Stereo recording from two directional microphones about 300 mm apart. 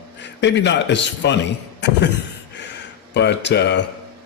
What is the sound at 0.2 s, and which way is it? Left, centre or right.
A man's voice, left.